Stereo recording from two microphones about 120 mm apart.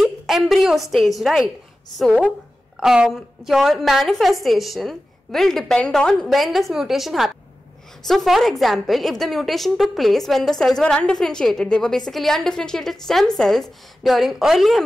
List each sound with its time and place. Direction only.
0.0 s a woman's voice: centre (ahead or behind)
2.8 s a woman's voice: 5° right (ahead or behind)